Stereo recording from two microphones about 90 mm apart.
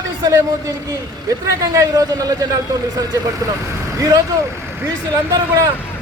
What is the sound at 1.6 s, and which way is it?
A man's voice, 40° right (ahead or behind).